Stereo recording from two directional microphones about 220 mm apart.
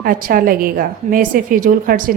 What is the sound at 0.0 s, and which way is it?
A woman's voice, 40° right (ahead or behind).